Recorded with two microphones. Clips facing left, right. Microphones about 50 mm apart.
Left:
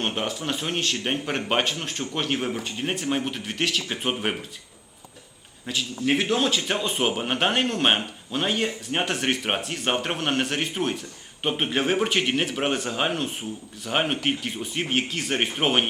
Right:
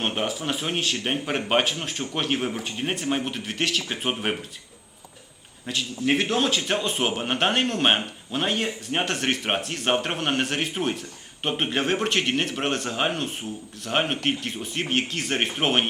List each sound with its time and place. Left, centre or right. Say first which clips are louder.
0.0 s a man's voice: right 1 dB; centre
5.6 s a man's voice: even; centre